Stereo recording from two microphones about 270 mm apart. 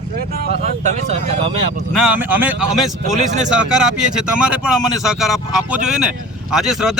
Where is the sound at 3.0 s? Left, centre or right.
Right.